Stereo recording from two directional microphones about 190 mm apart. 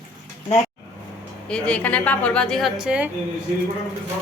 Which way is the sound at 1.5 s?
5° left (ahead or behind).